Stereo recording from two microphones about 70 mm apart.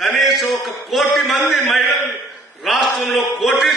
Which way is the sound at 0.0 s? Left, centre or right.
Centre.